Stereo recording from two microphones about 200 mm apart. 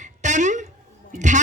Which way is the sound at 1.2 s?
35° right (ahead or behind).